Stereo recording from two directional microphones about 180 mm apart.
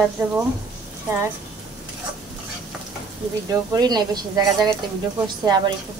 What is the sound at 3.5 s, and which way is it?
Speech, 20° right (ahead or behind).